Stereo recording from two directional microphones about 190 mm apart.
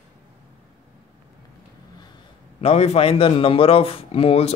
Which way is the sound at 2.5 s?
35° left (ahead or behind).